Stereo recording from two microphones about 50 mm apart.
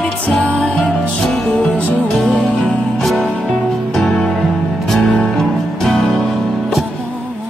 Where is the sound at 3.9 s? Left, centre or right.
Centre.